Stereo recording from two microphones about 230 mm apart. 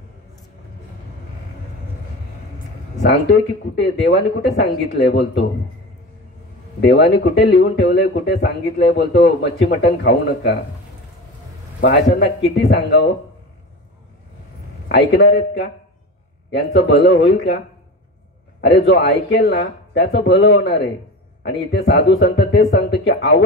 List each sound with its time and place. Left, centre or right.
3.0 s speech: left
6.8 s speech: left
11.8 s speech: left
14.9 s speech: left
18.6 s speech: left